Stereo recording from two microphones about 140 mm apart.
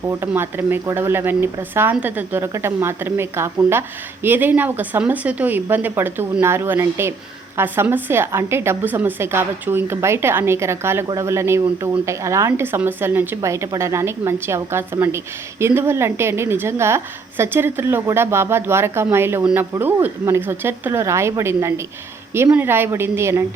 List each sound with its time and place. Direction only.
0.1 s speech: 15° right (ahead or behind)